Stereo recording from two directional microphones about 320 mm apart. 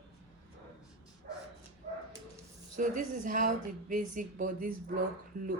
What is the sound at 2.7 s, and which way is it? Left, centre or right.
A woman's voice, right.